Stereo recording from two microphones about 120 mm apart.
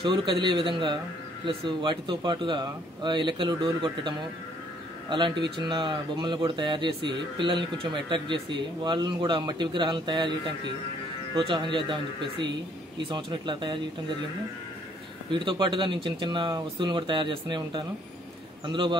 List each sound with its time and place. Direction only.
0.0 s speech: 40° right (ahead or behind)
5.1 s speech: 40° right (ahead or behind)
11.3 s speech: 40° right (ahead or behind)
15.3 s speech: 40° right (ahead or behind)